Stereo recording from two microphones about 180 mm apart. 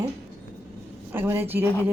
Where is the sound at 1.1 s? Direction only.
10° right (ahead or behind).